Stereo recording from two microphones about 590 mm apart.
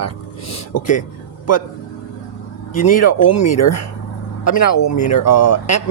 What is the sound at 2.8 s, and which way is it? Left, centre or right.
Speech, left.